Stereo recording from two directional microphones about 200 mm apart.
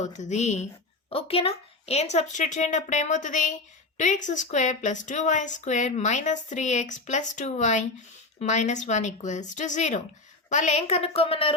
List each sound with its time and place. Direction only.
0.0 s speech: 35° left (ahead or behind)